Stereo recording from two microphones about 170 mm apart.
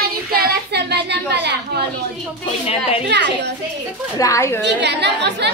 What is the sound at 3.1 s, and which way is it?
Speech, 90° right.